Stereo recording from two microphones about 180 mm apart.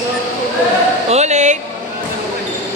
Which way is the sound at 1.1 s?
40° right (ahead or behind).